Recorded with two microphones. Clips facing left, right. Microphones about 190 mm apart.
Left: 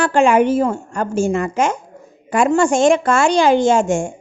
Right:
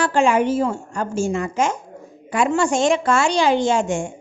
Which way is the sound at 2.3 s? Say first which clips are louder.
Left 4 dB; 50° left (ahead or behind).